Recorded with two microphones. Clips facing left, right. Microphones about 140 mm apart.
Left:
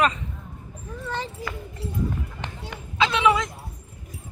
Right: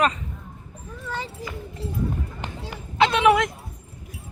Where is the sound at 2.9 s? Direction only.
55° right (ahead or behind).